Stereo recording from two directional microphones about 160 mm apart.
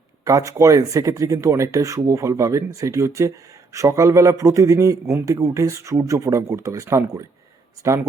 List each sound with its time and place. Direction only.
0.3 s speech: 20° right (ahead or behind)